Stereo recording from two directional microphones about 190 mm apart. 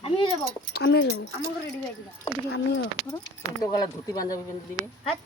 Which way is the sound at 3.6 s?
20° left (ahead or behind).